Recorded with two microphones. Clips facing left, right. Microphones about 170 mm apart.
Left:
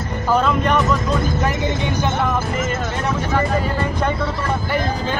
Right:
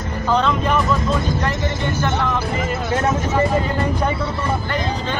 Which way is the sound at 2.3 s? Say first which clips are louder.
Even; 45° left (ahead or behind).